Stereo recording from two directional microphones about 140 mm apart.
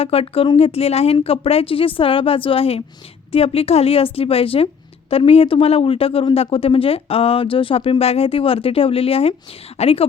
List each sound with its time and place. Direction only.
0.0 s a woman's voice: 45° left (ahead or behind)